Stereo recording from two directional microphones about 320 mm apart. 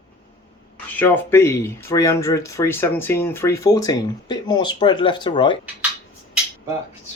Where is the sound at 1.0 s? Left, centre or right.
Centre.